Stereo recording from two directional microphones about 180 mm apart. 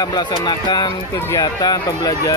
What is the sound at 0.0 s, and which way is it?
Speech, 20° left (ahead or behind).